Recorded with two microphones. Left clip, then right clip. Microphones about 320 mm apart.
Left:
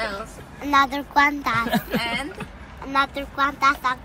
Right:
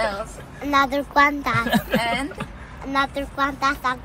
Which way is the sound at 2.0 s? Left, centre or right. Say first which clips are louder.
Right 3 dB; centre.